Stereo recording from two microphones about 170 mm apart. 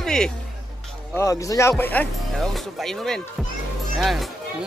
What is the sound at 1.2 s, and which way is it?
Speech, 20° left (ahead or behind).